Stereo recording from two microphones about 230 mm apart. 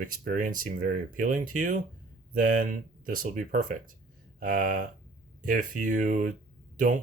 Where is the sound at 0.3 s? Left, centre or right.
Right.